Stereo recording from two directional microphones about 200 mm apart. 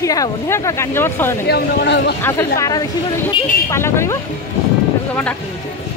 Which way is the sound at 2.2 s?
15° left (ahead or behind).